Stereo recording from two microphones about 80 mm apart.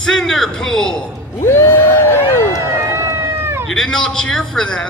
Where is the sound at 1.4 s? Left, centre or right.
Left.